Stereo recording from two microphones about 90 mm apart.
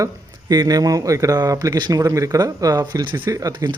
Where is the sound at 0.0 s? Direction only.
45° right (ahead or behind).